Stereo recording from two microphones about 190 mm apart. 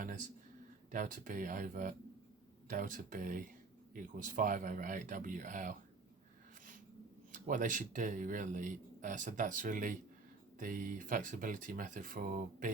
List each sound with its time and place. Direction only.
0.9 s speech: 45° right (ahead or behind)
7.3 s speech: 45° right (ahead or behind)